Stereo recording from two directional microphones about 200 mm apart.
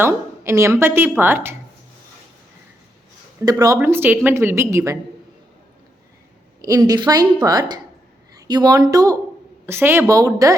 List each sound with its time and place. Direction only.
0.0 s a woman's voice: 15° right (ahead or behind)
3.4 s a woman's voice: 15° right (ahead or behind)
6.6 s a woman's voice: 20° right (ahead or behind)